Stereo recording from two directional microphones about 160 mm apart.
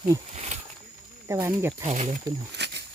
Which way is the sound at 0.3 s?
45° right (ahead or behind).